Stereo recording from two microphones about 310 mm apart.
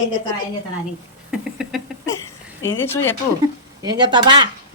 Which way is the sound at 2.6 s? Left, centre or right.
Centre.